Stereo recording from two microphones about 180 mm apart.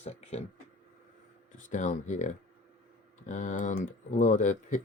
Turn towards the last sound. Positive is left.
turn(degrees=45)  # may be behind; listen again after turning